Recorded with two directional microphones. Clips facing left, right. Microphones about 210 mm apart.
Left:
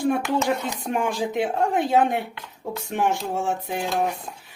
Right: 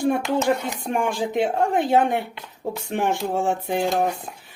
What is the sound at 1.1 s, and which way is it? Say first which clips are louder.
Speech: right 2 dB; 25° right (ahead or behind).